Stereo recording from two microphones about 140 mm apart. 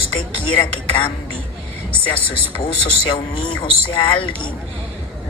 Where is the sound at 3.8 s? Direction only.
35° left (ahead or behind).